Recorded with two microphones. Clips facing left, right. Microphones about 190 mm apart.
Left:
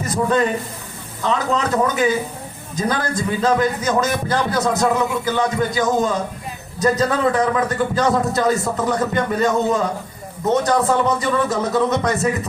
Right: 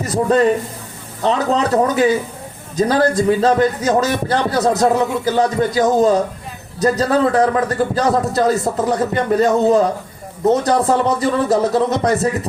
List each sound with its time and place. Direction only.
0.0 s a man's voice: 35° right (ahead or behind)